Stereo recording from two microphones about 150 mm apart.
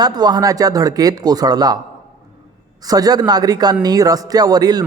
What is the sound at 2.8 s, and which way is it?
Speech, 25° right (ahead or behind).